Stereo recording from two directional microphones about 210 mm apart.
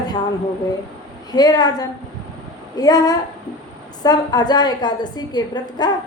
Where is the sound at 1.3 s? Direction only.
20° left (ahead or behind).